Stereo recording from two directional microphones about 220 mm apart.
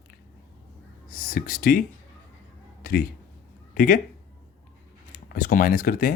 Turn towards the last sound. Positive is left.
turn(degrees=40)  # may be behind; listen again after turning